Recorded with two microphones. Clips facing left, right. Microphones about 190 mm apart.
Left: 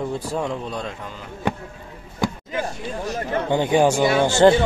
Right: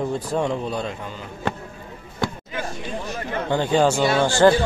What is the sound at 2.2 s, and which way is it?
Music, 10° left (ahead or behind).